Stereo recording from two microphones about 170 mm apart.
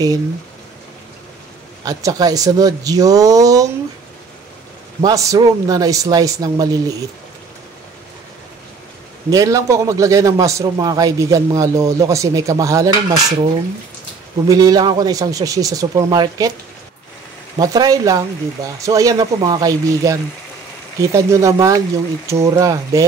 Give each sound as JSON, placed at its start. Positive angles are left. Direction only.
{"t": 1.9, "sound": "a man's voice", "side_deg": -20}
{"t": 5.0, "sound": "a man's voice", "side_deg": -20}
{"t": 9.3, "sound": "a man's voice", "side_deg": -20}
{"t": 14.5, "sound": "a man's voice", "side_deg": -20}
{"t": 17.6, "sound": "a man's voice", "side_deg": -20}